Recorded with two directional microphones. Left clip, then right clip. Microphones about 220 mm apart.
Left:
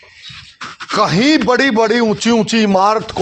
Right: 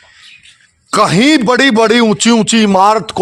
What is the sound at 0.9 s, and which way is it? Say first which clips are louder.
Speech: right 3 dB; 40° right (ahead or behind).